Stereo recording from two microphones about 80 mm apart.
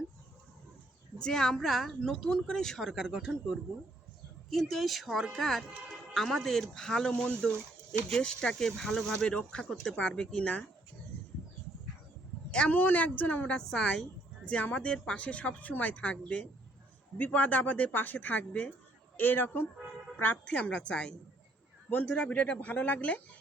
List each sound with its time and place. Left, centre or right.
1.2 s speech: centre
2.9 s speech: centre
4.4 s a woman's voice: centre
12.5 s a woman's voice: centre